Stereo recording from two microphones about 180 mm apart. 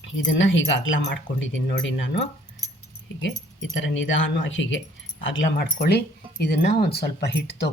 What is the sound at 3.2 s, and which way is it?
Speech, 90° left.